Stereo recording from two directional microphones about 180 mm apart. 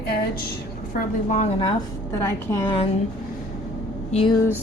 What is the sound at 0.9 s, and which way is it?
Speech, 40° left (ahead or behind).